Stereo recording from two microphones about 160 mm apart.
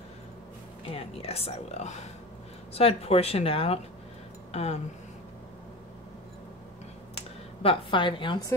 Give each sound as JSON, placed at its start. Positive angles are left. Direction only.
{"t": 0.9, "sound": "speech", "side_deg": 40}
{"t": 7.6, "sound": "speech", "side_deg": 35}